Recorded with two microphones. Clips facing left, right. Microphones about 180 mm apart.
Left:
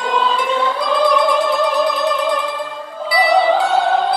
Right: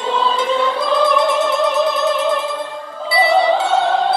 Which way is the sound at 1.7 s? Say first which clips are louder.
Right 1 dB; 25° right (ahead or behind).